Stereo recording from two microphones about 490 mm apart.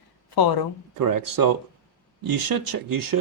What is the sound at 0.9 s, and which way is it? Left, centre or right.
Speech, right.